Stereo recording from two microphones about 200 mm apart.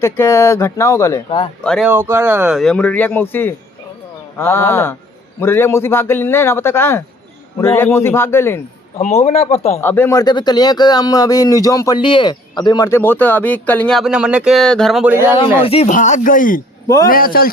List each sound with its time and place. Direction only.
0.0 s speech: 15° left (ahead or behind)
1.6 s speech: 5° left (ahead or behind)
1.9 s speech: 10° right (ahead or behind); by 8.6 s 10° left (ahead or behind)
9.2 s speech: 30° left (ahead or behind)
9.8 s speech: 10° left (ahead or behind); by 15.4 s 10° right (ahead or behind)
15.6 s a man's voice: 30° left (ahead or behind); by 17.5 s 45° left (ahead or behind)